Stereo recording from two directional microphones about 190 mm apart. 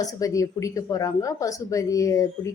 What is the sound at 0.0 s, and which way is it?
A woman's voice, 20° left (ahead or behind).